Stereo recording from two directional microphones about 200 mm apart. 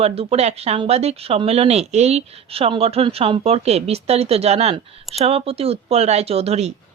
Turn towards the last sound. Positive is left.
turn(degrees=-30)  # may be behind; listen again after turning